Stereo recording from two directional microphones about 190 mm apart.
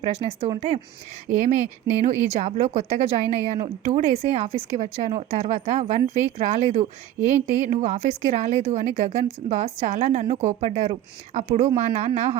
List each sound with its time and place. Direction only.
0.0 s speech: 30° right (ahead or behind)